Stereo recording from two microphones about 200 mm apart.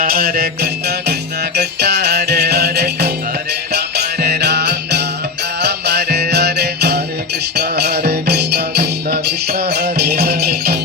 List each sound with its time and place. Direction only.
0.0 s music: 50° right (ahead or behind)